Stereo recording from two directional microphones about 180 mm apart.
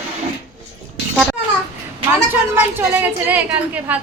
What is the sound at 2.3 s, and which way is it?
A woman's voice, 10° right (ahead or behind).